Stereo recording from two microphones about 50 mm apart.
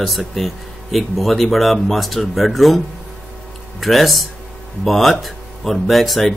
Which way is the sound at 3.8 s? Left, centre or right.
Centre.